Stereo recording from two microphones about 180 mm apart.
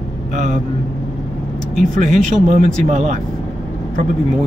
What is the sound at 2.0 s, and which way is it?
Speech, 45° right (ahead or behind).